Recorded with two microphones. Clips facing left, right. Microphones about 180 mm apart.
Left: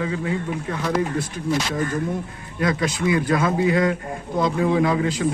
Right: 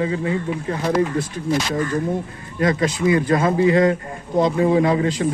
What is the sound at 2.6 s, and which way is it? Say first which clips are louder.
A man's voice: right 3 dB; 40° right (ahead or behind).